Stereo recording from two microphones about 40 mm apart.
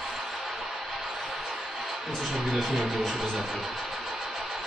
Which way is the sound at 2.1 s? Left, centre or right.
Centre.